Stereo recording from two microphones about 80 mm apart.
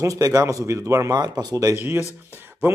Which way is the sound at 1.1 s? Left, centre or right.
Right.